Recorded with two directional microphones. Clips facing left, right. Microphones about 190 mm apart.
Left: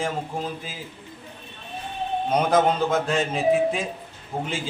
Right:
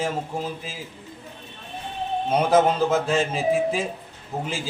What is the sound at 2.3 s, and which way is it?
Speech, 5° right (ahead or behind).